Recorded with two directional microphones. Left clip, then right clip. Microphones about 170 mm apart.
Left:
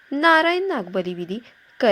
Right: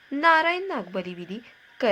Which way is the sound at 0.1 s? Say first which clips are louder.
Left 3 dB; 25° left (ahead or behind).